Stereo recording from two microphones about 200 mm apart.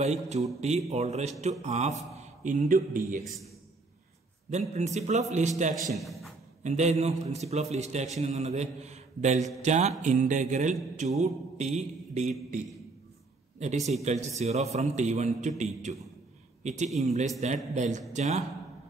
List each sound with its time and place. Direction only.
0.0 s mantra: 35° right (ahead or behind)
4.5 s mantra: 35° right (ahead or behind)
5.9 s a man's voice: centre (ahead or behind)
6.6 s mantra: 35° right (ahead or behind)